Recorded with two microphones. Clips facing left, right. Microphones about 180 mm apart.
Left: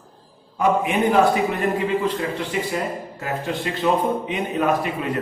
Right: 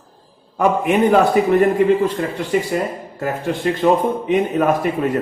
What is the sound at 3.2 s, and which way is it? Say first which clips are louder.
A man's voice: right 6 dB; 50° right (ahead or behind).